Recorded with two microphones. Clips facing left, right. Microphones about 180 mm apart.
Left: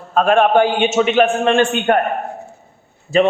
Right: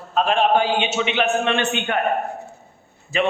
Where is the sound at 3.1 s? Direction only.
40° left (ahead or behind).